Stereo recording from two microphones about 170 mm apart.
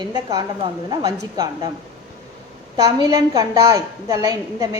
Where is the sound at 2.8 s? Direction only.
20° right (ahead or behind).